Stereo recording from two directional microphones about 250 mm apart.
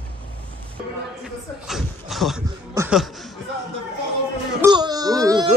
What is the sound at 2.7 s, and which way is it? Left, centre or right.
Music, centre.